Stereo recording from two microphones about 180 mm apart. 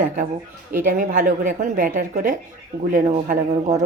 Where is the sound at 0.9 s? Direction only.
45° right (ahead or behind).